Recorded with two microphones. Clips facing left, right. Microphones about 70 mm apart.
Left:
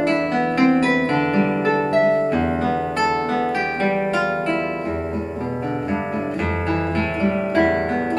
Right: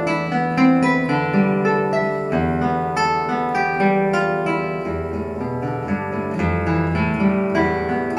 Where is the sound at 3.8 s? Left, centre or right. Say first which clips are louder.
Right 3 dB; right.